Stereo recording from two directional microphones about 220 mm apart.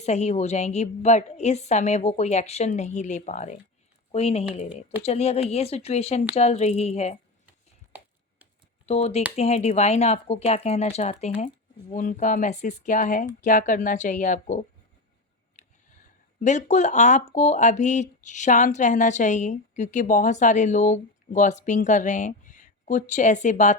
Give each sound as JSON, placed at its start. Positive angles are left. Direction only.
{"t": 0.0, "sound": "speech", "side_deg": 30}
{"t": 8.9, "sound": "speech", "side_deg": 30}
{"t": 15.6, "sound": "a sound", "side_deg": 30}
{"t": 16.4, "sound": "speech", "side_deg": 35}